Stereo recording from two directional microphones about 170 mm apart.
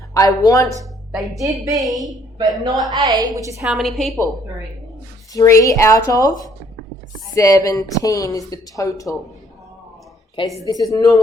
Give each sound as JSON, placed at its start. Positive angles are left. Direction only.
{"t": 0.1, "sound": "speech", "side_deg": 20}
{"t": 1.1, "sound": "speech", "side_deg": 0}
{"t": 1.6, "sound": "a woman's voice", "side_deg": -20}
{"t": 3.6, "sound": "a woman's voice", "side_deg": 0}
{"t": 5.3, "sound": "speech", "side_deg": 20}
{"t": 7.3, "sound": "speech", "side_deg": 20}
{"t": 10.3, "sound": "speech", "side_deg": 20}